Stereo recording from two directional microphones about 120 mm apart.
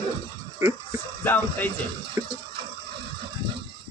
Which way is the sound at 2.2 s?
20° right (ahead or behind).